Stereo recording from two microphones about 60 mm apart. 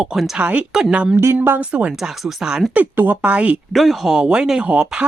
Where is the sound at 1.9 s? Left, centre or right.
Centre.